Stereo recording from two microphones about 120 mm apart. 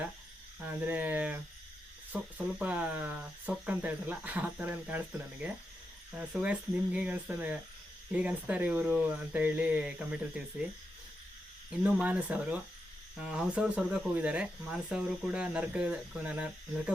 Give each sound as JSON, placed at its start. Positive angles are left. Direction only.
{"t": 0.6, "sound": "speech", "side_deg": -15}
{"t": 11.7, "sound": "speech", "side_deg": -10}